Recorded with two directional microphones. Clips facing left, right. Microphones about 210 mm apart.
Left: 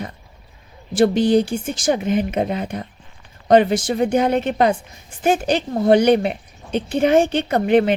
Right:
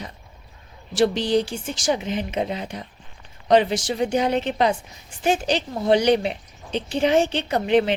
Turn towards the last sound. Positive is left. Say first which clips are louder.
# left 4 dB
turn(degrees=55)  # may be behind; listen again after turning